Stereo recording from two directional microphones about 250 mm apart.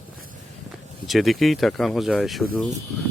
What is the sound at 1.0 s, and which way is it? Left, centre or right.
Speech, centre.